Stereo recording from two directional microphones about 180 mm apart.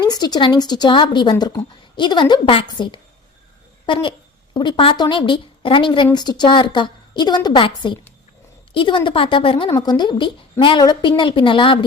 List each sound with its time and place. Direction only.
0.0 s a woman's voice: 20° left (ahead or behind)
8.7 s a woman's voice: 30° left (ahead or behind)